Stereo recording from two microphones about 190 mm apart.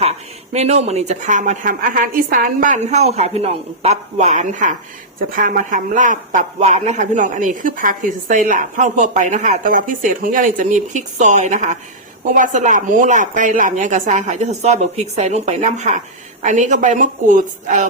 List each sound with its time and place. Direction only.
0.5 s a man's voice: 35° right (ahead or behind)